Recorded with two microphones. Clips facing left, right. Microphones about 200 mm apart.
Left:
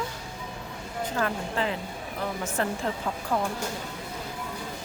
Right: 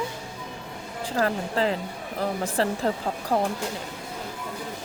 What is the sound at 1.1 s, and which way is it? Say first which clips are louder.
Speech: right 5 dB; 35° right (ahead or behind).